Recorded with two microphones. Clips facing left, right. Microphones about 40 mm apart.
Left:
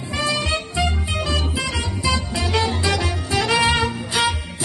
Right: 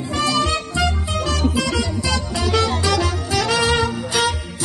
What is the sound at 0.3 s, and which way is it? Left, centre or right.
Music, left.